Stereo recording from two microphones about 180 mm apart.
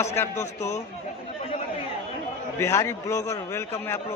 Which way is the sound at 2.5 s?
15° left (ahead or behind).